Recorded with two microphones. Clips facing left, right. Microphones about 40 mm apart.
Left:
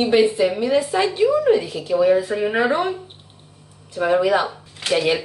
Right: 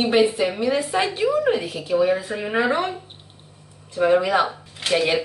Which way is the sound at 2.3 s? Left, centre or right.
Centre.